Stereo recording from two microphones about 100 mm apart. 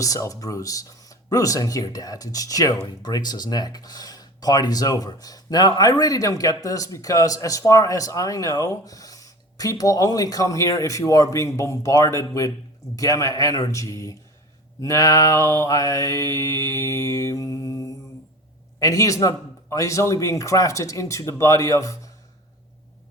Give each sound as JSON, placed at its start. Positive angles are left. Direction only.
{"t": 0.0, "sound": "speech", "side_deg": 35}